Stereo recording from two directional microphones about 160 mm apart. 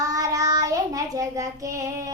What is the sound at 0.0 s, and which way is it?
Child singing, 20° right (ahead or behind).